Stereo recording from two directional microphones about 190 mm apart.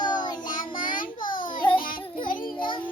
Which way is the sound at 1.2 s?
45° left (ahead or behind).